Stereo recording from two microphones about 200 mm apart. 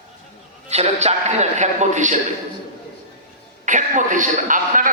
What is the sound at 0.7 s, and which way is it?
A man's voice, 35° right (ahead or behind).